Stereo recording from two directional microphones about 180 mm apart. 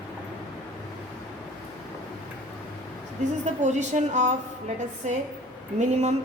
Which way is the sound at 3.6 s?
40° right (ahead or behind).